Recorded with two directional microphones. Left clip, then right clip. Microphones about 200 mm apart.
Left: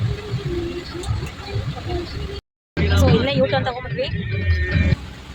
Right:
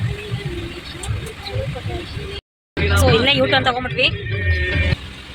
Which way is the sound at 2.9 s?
Centre (ahead or behind).